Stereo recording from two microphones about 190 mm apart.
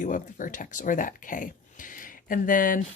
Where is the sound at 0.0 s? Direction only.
45° left (ahead or behind).